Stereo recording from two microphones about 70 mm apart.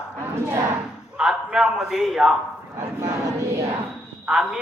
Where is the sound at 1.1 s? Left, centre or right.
Centre.